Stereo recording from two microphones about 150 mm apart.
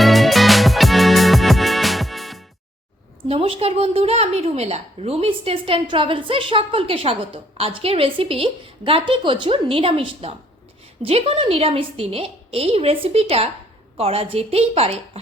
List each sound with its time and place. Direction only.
0.0 s music: centre (ahead or behind)
3.2 s a woman's voice: 40° right (ahead or behind)